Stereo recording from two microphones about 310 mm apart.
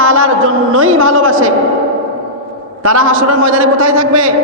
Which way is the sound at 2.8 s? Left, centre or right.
Right.